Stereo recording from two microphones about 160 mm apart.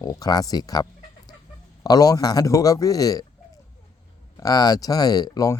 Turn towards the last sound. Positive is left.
turn(degrees=25)  # may be behind; listen again after turning